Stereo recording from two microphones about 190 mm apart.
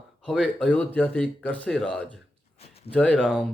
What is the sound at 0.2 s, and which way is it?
Speech, 5° left (ahead or behind).